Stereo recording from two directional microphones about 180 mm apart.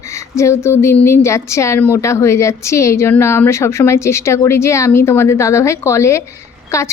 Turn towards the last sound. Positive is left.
turn(degrees=15)  # may be behind; listen again after turning